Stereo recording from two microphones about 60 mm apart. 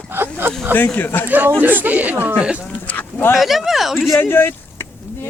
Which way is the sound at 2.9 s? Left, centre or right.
Left.